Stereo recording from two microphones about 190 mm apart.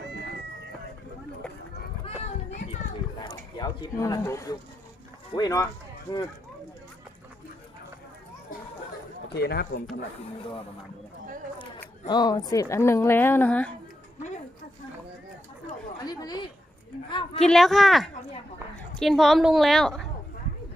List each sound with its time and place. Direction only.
3.2 s speech: 20° left (ahead or behind)
9.3 s speech: 55° left (ahead or behind)
12.0 s a woman's voice: 20° left (ahead or behind)
16.0 s speech: 20° left (ahead or behind)
17.4 s a woman's voice: centre (ahead or behind)